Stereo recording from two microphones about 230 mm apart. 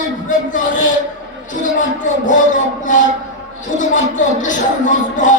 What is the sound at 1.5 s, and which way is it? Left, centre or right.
Speech, left.